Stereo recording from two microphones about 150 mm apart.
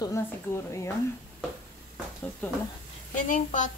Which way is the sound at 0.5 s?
15° left (ahead or behind).